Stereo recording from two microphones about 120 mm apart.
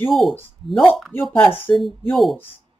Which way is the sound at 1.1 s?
15° left (ahead or behind).